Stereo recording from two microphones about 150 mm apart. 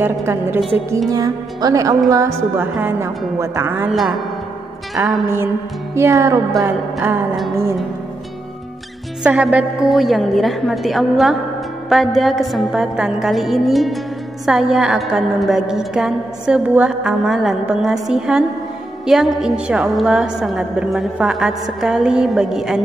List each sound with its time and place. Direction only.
0.0 s a woman's voice: 15° right (ahead or behind)
3.9 s a woman's voice: centre (ahead or behind)
5.2 s a woman's voice: 15° right (ahead or behind)
9.2 s a woman's voice: 10° right (ahead or behind)